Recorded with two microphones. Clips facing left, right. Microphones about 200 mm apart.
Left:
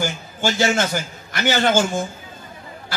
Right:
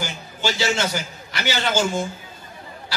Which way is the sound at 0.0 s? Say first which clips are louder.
Left 4 dB; 50° left (ahead or behind).